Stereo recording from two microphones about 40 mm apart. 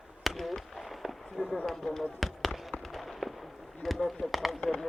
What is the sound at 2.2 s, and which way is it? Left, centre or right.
Fireworks, centre.